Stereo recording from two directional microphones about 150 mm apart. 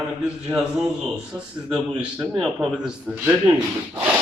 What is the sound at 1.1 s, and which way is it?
A man's voice, 5° right (ahead or behind).